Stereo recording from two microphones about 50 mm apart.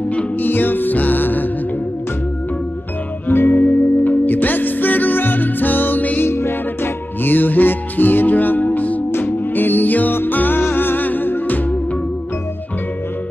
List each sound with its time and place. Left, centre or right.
0.4 s music: left
3.3 s music: left
6.2 s music: left